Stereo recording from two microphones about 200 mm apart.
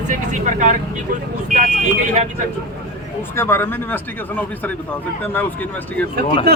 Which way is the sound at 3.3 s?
10° left (ahead or behind).